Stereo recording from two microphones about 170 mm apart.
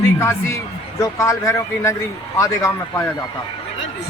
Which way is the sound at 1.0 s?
15° left (ahead or behind).